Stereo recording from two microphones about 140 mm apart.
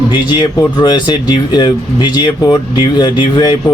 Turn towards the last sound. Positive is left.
turn(degrees=30)  # may be behind; listen again after turning